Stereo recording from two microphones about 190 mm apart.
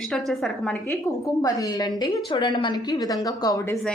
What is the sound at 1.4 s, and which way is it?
A woman's voice, 20° left (ahead or behind).